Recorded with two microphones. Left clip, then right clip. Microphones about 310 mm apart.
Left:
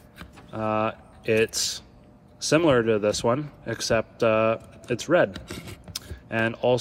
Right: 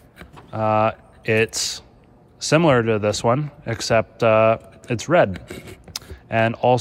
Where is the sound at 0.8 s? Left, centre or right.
Right.